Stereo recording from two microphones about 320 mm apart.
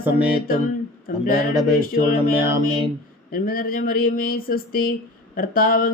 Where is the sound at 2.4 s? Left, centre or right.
Centre.